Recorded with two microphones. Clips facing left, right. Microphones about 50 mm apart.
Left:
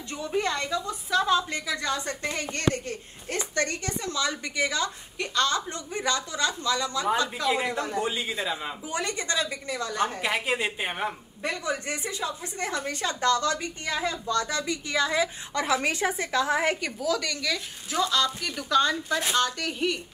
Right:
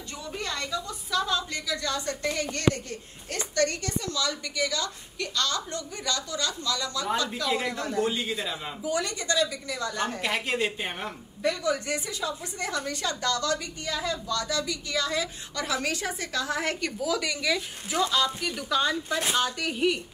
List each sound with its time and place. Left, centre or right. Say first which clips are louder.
0.3 s a woman's voice: left 5 dB; left
8.8 s a woman's voice: right 3 dB; left
10.2 s a woman's voice: left 1 dB; centre
11.4 s a woman's voice: right 3 dB; left
17.0 s speech: right 1 dB; centre